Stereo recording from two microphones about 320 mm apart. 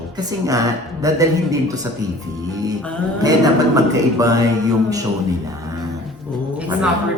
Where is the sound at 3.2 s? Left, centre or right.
Centre.